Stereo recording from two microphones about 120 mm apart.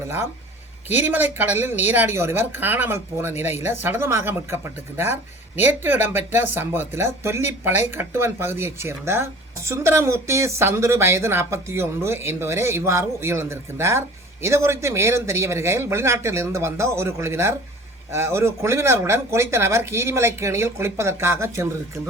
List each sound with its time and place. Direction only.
0.9 s speech: 15° right (ahead or behind)